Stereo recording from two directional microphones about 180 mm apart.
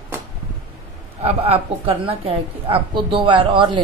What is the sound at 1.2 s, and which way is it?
A woman's voice, 35° right (ahead or behind).